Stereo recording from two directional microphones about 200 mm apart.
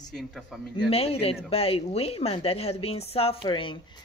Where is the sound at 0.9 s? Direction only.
30° left (ahead or behind).